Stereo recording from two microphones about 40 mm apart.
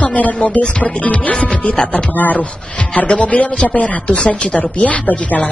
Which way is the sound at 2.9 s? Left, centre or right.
Left.